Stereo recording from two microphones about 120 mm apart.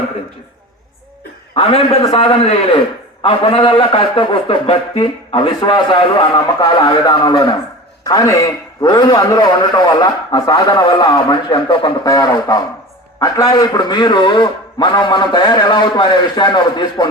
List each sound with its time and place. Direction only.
1.5 s a man's voice: 55° left (ahead or behind)
8.0 s a man's voice: 30° left (ahead or behind)